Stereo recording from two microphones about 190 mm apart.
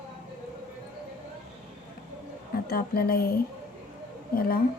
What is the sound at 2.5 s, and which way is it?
Speech, 55° left (ahead or behind).